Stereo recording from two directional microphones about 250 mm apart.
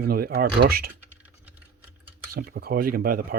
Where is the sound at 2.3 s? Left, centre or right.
Right.